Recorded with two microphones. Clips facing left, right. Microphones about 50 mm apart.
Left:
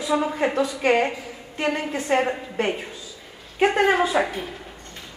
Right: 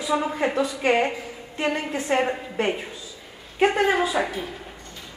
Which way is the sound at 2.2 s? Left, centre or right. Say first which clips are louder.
Even; centre.